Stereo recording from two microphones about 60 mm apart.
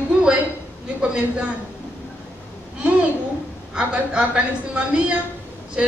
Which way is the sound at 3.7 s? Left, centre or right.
Centre.